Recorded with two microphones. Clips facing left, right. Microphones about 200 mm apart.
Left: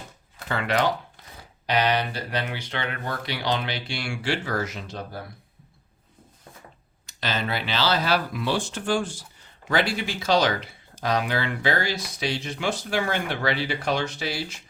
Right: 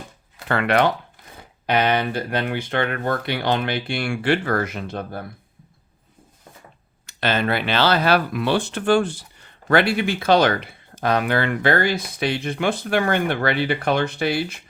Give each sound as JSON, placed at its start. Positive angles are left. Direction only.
{"t": 0.4, "sound": "speech", "side_deg": -60}
{"t": 7.1, "sound": "speech", "side_deg": -60}